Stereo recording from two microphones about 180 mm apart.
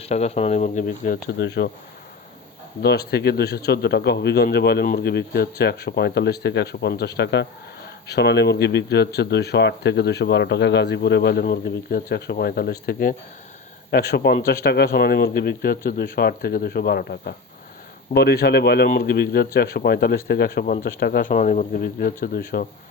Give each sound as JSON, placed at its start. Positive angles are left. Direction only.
{"t": 0.0, "sound": "speech", "side_deg": 35}
{"t": 1.4, "sound": "speech", "side_deg": 70}
{"t": 2.8, "sound": "speech", "side_deg": 65}
{"t": 21.7, "sound": "speech", "side_deg": 60}